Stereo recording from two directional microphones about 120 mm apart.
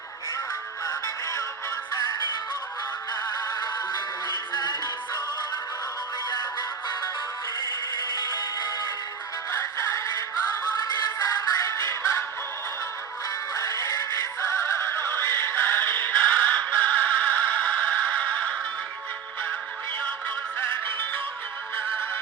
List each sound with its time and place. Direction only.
0.9 s music: 30° left (ahead or behind)
6.3 s music: 35° left (ahead or behind)
8.1 s music: 35° left (ahead or behind)
9.5 s music: 25° left (ahead or behind)
13.5 s synthetic singing: 25° left (ahead or behind)
20.6 s music: 15° left (ahead or behind)